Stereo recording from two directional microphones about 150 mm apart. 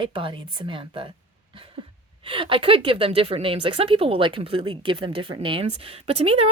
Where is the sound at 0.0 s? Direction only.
35° right (ahead or behind).